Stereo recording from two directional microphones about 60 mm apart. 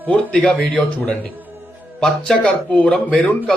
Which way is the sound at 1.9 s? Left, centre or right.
Centre.